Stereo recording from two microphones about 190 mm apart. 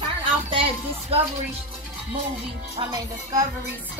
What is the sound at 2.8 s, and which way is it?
Speech, 25° right (ahead or behind).